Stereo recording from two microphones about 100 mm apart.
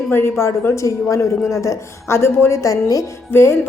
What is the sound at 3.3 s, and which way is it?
Speech, 25° left (ahead or behind).